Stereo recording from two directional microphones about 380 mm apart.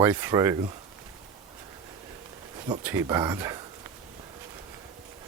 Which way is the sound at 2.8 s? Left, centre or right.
Centre.